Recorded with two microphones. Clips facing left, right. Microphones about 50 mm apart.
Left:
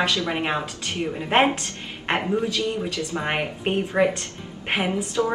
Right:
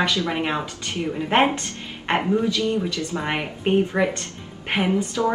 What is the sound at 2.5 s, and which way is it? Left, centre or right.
Speech, left.